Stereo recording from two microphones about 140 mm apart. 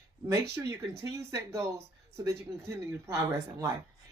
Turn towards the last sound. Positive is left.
turn(degrees=-20)  # may be behind; listen again after turning